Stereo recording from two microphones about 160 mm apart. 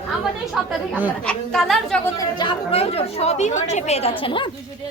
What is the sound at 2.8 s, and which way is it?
A woman's voice, 40° left (ahead or behind).